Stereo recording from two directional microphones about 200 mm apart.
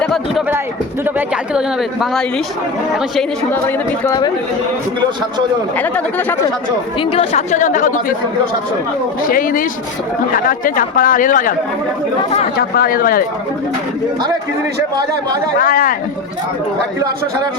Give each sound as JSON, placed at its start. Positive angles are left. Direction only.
{"t": 0.0, "sound": "a man's voice", "side_deg": 0}
{"t": 1.5, "sound": "speech", "side_deg": 0}
{"t": 5.7, "sound": "speech", "side_deg": 10}
{"t": 7.0, "sound": "speech", "side_deg": 30}
{"t": 9.2, "sound": "speech", "side_deg": 45}
{"t": 12.5, "sound": "speech", "side_deg": 50}
{"t": 15.5, "sound": "speech", "side_deg": 45}